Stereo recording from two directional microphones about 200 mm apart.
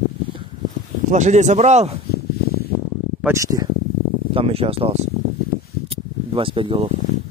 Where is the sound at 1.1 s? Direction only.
35° right (ahead or behind).